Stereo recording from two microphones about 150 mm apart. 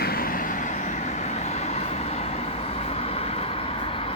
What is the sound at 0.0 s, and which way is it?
Vehicle, 85° left.